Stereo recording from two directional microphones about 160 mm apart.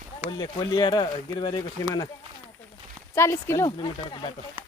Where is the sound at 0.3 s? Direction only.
30° left (ahead or behind).